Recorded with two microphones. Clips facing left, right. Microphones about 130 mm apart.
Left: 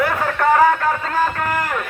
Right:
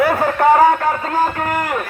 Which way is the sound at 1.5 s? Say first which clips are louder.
Right 2 dB; 20° right (ahead or behind).